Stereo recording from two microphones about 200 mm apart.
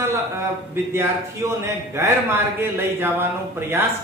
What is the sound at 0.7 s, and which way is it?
A man's voice, 10° right (ahead or behind).